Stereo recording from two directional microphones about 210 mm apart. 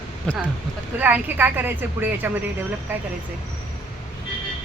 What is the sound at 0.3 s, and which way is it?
Speech, 5° left (ahead or behind).